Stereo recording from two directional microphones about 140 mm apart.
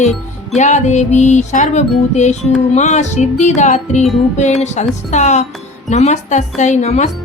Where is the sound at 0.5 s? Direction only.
55° left (ahead or behind).